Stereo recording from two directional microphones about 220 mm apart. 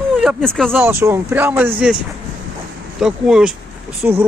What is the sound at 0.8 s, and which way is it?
Speech, 10° right (ahead or behind).